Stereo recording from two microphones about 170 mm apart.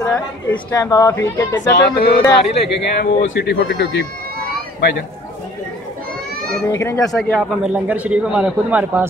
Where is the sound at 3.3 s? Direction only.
80° left.